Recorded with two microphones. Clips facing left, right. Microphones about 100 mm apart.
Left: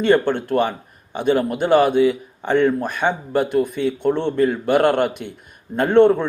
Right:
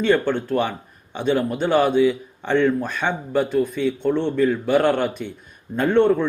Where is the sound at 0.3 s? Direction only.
50° left (ahead or behind).